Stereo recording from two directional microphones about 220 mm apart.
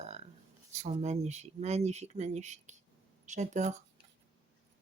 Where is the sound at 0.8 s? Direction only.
30° right (ahead or behind).